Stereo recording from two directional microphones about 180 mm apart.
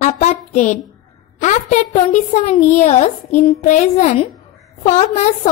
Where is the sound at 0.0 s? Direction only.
40° left (ahead or behind).